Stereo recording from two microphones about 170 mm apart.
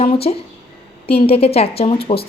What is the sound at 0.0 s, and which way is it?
A woman's voice, 35° left (ahead or behind).